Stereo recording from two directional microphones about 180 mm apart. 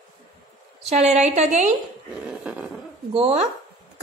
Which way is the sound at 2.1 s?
5° right (ahead or behind).